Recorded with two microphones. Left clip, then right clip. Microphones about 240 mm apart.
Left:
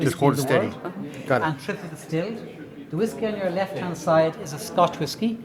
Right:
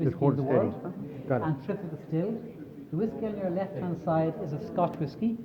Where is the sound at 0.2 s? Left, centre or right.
Left.